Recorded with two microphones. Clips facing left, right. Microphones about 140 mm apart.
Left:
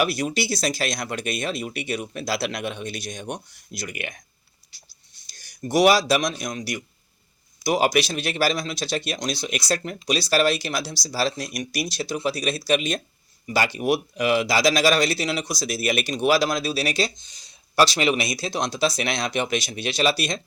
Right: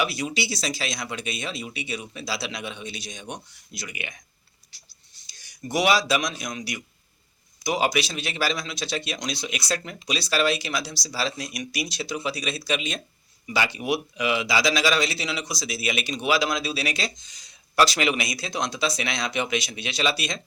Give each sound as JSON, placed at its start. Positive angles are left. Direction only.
{"t": 0.0, "sound": "speech", "side_deg": 45}
{"t": 5.4, "sound": "speech", "side_deg": 40}